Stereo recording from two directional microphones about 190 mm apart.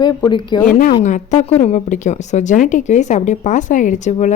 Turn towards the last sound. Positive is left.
turn(degrees=40)  # may be behind; listen again after turning